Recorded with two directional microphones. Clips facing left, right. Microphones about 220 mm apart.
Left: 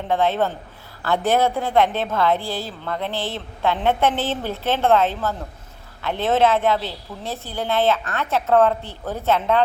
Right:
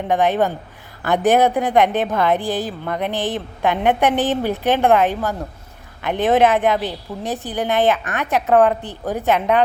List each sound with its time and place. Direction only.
0.1 s a woman's voice: 15° right (ahead or behind)